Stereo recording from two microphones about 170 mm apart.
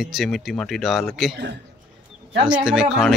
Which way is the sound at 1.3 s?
90° right.